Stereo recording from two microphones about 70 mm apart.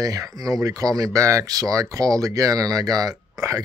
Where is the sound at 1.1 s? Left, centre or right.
Right.